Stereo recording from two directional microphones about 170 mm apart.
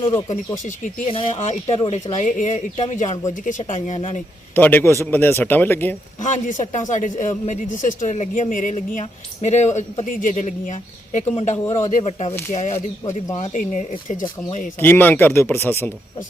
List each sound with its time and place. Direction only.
0.0 s speech: 35° left (ahead or behind)
4.5 s a man's voice: 10° left (ahead or behind)
6.2 s a man's voice: 45° left (ahead or behind)
14.8 s a man's voice: 10° left (ahead or behind)